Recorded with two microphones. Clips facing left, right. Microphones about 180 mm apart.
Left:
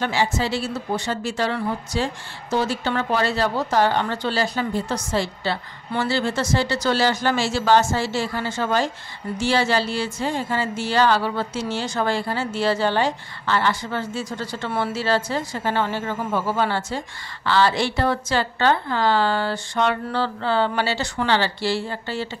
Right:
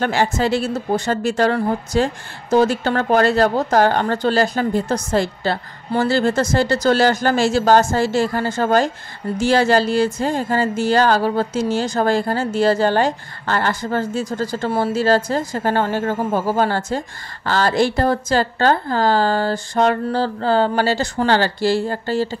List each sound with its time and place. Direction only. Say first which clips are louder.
0.0 s a woman's voice: right 4 dB; 50° right (ahead or behind)